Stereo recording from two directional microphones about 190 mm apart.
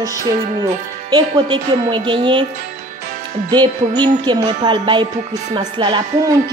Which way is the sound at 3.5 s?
20° right (ahead or behind).